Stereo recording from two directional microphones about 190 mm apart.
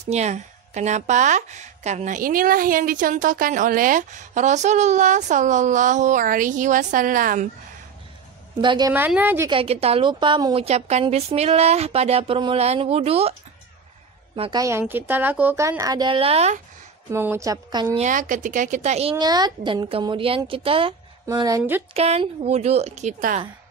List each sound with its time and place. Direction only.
0.1 s a woman's voice: 35° right (ahead or behind)
8.5 s speech: 20° right (ahead or behind)
8.9 s a woman's voice: 10° right (ahead or behind)
9.5 s a woman's voice: 30° right (ahead or behind)
14.3 s a woman's voice: 30° right (ahead or behind)
14.6 s a woman's voice: 15° right (ahead or behind); by 16.6 s 35° right (ahead or behind)
17.1 s a woman's voice: 15° right (ahead or behind)
17.9 s speech: 40° right (ahead or behind); by 21.8 s 15° right (ahead or behind)
21.9 s a woman's voice: 35° right (ahead or behind)